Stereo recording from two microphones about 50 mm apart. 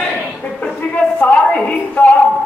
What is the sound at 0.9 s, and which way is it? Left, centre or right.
A man's voice, left.